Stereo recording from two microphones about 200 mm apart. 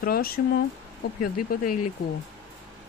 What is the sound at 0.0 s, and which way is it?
Speech, 50° left (ahead or behind).